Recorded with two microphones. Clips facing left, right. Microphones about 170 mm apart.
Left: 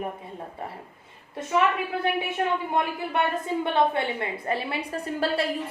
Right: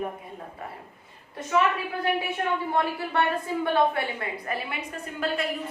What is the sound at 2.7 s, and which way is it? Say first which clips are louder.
A woman's voice: even; 20° left (ahead or behind).